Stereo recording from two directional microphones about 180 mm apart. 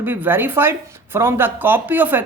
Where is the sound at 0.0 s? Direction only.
10° right (ahead or behind).